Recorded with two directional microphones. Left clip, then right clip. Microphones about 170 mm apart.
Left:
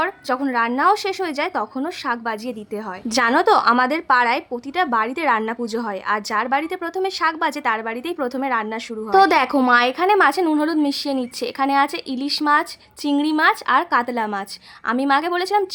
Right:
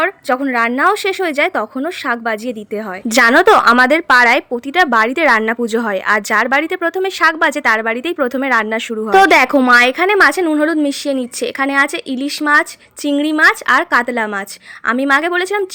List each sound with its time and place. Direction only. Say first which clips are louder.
0.0 s a woman's voice: right 6 dB; 20° right (ahead or behind)
3.1 s a woman's voice: right 7 dB; 30° right (ahead or behind)